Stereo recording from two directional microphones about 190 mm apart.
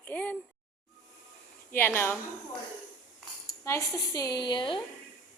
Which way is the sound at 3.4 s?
15° left (ahead or behind).